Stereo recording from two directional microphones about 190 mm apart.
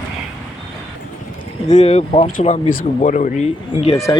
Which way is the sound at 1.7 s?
35° left (ahead or behind).